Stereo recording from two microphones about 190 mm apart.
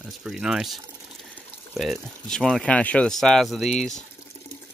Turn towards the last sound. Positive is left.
turn(degrees=0)  # may be behind; listen again after turning